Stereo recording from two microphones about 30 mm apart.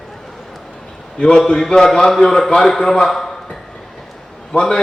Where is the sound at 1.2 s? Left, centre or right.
Left.